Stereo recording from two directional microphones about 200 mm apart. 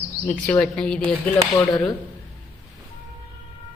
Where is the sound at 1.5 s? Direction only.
15° left (ahead or behind).